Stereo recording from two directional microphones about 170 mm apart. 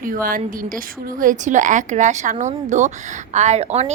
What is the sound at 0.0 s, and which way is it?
A woman's voice, 55° right (ahead or behind).